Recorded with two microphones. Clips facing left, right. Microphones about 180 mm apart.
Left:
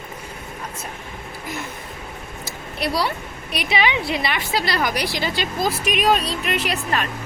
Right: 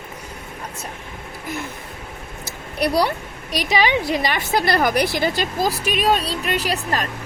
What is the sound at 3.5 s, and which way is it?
A woman's voice, 40° right (ahead or behind).